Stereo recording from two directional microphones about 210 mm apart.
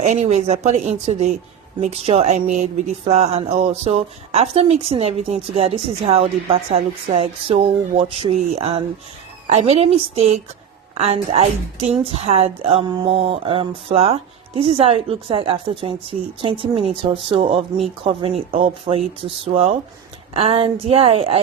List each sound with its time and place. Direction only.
0.0 s speech: 35° right (ahead or behind)